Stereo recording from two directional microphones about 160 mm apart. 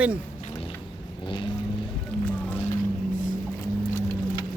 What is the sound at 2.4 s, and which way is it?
Boat, 10° left (ahead or behind).